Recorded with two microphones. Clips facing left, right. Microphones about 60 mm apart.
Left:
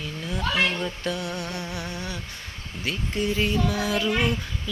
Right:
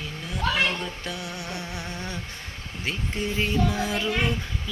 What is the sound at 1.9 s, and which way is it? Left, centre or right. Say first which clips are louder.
Humming: left 1 dB; right.